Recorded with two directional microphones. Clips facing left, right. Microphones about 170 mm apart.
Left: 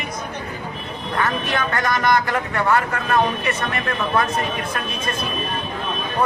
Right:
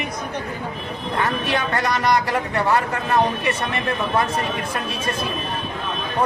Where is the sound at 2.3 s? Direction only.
25° right (ahead or behind).